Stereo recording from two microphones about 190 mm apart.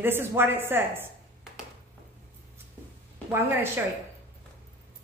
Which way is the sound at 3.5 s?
10° right (ahead or behind).